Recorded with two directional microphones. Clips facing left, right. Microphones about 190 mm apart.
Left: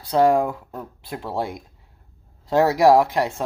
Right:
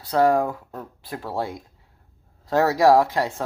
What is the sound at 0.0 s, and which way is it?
Speech, 20° left (ahead or behind).